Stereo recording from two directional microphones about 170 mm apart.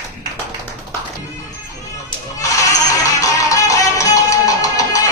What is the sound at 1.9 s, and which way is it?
Music, 20° left (ahead or behind).